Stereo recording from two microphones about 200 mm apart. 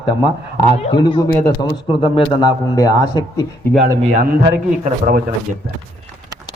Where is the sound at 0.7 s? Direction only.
25° left (ahead or behind).